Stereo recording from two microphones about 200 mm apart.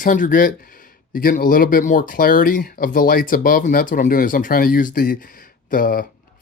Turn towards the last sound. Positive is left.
turn(degrees=45)  # may be behind; listen again after turning